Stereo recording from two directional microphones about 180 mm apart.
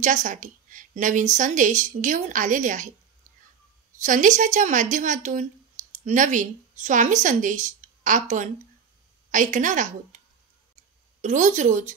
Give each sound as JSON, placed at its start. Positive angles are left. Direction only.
{"t": 0.0, "sound": "a woman's voice", "side_deg": -45}
{"t": 4.0, "sound": "a woman's voice", "side_deg": -45}